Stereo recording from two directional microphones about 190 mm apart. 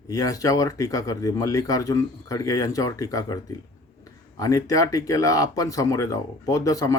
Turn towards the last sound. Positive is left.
turn(degrees=20)  # may be behind; listen again after turning